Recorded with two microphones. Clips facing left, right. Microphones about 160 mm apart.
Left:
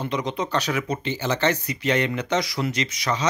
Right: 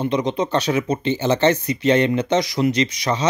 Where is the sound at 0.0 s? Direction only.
20° right (ahead or behind).